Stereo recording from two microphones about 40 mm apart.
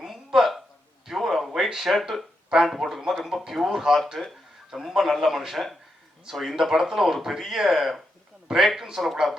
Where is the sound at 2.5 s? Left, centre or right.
Centre.